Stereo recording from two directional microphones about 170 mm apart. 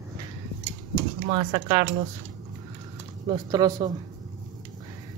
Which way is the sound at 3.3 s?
25° right (ahead or behind).